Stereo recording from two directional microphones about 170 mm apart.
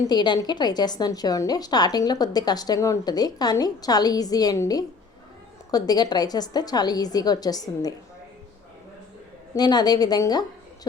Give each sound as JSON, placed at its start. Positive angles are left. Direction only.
{"t": 0.1, "sound": "a woman's voice", "side_deg": 25}
{"t": 9.6, "sound": "a woman's voice", "side_deg": 25}